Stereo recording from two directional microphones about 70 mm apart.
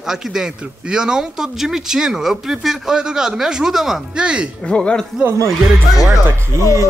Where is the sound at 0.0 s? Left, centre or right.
Centre.